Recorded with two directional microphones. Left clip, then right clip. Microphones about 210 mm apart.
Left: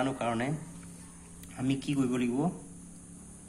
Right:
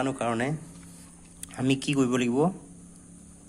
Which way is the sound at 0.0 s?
35° right (ahead or behind).